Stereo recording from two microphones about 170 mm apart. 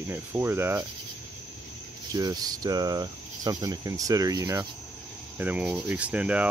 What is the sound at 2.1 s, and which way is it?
Speech, 20° right (ahead or behind).